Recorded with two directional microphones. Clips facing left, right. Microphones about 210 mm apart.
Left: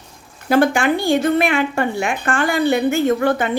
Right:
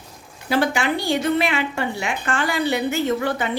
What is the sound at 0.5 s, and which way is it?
A woman's voice, 50° left (ahead or behind).